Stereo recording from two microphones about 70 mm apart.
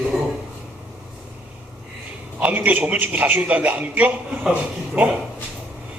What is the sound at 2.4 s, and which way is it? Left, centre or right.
A man's voice, right.